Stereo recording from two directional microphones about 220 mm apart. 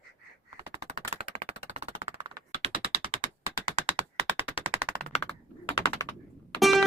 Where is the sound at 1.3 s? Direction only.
30° right (ahead or behind).